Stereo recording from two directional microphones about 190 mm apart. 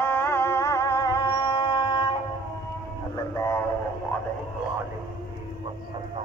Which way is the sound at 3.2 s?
15° left (ahead or behind).